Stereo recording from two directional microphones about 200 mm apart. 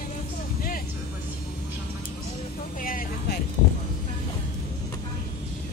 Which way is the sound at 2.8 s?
45° left (ahead or behind).